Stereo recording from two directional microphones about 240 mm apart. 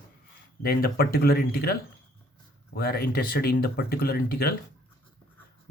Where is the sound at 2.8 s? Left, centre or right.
Left.